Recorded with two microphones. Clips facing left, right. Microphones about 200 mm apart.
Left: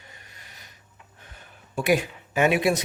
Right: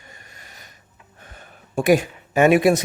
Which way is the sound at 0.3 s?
45° right (ahead or behind).